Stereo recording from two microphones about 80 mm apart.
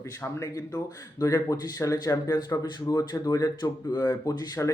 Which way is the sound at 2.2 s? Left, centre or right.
Left.